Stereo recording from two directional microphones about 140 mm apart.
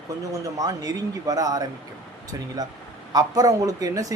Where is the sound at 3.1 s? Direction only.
25° right (ahead or behind).